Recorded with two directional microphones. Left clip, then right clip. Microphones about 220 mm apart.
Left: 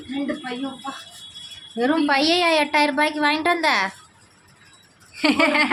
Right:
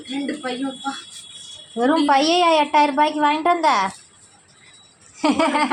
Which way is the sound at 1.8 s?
5° right (ahead or behind).